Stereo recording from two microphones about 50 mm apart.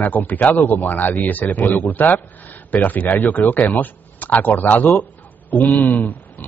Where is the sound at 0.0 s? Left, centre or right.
Left.